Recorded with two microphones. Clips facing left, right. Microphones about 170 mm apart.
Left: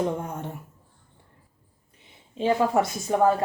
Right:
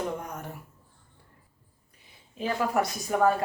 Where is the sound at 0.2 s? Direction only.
25° left (ahead or behind).